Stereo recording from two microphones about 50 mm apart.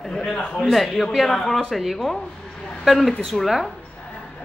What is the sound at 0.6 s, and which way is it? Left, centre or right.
Speech, centre.